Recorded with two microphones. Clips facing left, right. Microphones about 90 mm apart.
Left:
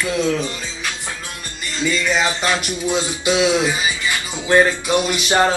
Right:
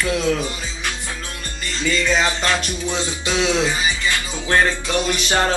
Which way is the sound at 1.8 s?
15° left (ahead or behind).